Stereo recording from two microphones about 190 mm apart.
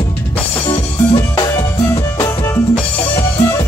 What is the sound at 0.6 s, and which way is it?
Music, 25° left (ahead or behind).